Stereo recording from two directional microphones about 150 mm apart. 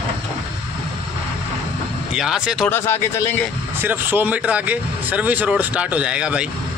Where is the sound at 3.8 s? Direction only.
15° right (ahead or behind).